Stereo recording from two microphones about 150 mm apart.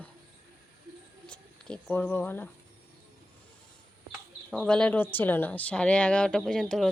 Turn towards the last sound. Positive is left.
turn(degrees=5)  # may be behind; listen again after turning